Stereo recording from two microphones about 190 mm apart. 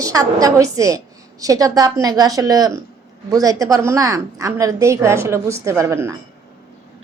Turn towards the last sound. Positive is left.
turn(degrees=-15)  # may be behind; listen again after turning